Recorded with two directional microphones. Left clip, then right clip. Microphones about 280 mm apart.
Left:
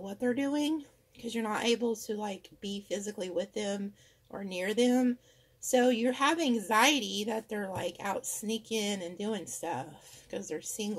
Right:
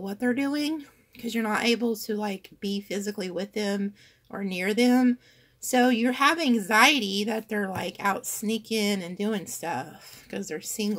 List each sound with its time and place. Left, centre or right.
0.0 s a woman's voice: right